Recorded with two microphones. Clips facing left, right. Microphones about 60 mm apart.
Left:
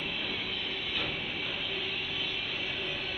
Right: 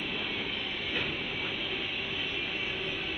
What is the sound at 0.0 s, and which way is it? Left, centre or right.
Train, right.